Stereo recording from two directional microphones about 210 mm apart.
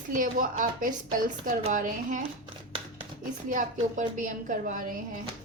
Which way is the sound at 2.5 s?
25° right (ahead or behind).